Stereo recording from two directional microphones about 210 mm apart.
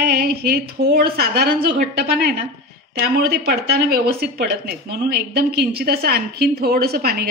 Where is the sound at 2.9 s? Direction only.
45° right (ahead or behind).